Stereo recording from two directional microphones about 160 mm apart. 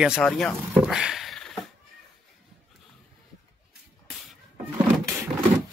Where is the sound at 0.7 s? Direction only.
5° right (ahead or behind).